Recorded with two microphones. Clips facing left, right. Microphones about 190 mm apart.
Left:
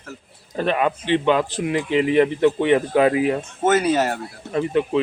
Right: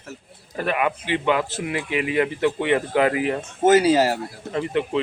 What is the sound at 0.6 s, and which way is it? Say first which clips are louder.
Speech: left 3 dB; 25° left (ahead or behind).